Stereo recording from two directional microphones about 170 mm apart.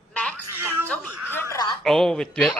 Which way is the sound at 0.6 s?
15° right (ahead or behind).